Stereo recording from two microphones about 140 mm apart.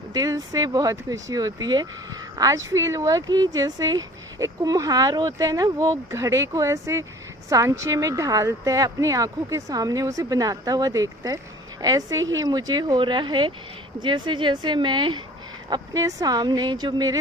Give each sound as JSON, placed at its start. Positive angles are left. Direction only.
{"t": 0.1, "sound": "speech", "side_deg": -25}